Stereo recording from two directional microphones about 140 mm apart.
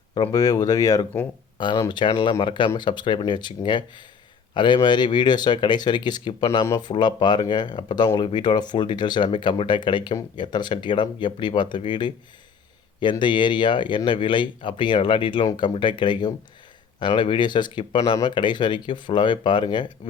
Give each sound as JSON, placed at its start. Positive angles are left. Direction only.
{"t": 0.1, "sound": "speech", "side_deg": 30}